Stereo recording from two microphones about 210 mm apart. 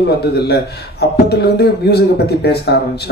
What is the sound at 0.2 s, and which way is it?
A man's voice, 50° left (ahead or behind).